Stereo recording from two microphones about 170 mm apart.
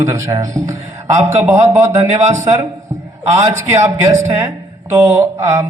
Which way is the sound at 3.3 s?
15° right (ahead or behind).